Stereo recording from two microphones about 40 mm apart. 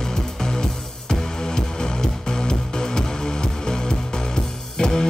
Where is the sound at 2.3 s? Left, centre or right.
Centre.